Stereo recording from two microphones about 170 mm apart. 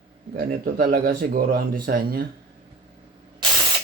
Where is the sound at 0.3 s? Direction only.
60° right (ahead or behind).